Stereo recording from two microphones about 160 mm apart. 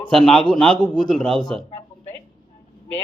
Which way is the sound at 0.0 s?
5° left (ahead or behind).